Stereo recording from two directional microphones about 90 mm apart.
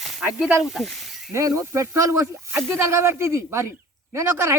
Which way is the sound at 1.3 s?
35° right (ahead or behind).